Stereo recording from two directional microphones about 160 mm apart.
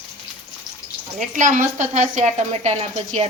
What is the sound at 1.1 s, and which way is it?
Speech, 50° right (ahead or behind).